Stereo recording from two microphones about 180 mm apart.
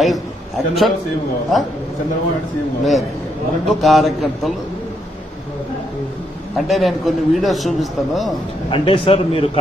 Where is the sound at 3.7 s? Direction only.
Centre (ahead or behind).